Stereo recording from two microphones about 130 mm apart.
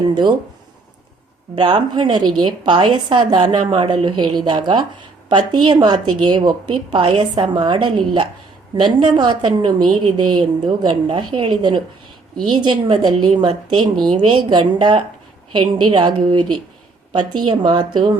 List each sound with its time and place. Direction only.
0.1 s a woman's voice: 35° right (ahead or behind)
1.5 s a woman's voice: 35° right (ahead or behind)